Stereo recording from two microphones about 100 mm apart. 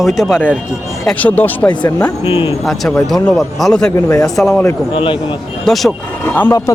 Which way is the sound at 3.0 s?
5° left (ahead or behind).